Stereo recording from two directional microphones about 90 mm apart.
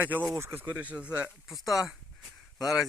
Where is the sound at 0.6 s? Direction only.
15° right (ahead or behind).